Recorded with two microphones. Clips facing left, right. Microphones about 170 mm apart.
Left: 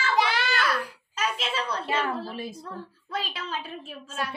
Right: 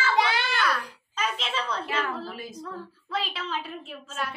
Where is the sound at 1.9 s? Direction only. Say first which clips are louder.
Left 2 dB; 30° left (ahead or behind).